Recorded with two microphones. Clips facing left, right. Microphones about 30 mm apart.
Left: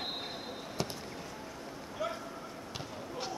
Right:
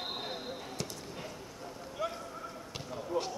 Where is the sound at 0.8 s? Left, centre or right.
Centre.